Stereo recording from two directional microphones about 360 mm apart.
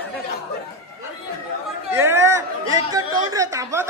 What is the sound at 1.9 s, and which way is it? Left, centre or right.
Chatter, centre.